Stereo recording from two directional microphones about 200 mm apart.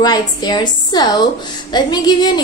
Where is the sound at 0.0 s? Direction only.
20° left (ahead or behind).